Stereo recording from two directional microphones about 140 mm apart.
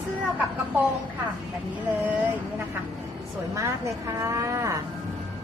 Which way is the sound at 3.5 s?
20° right (ahead or behind).